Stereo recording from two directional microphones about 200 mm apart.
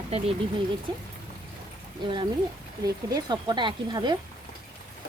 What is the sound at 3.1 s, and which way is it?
Speech, 20° right (ahead or behind).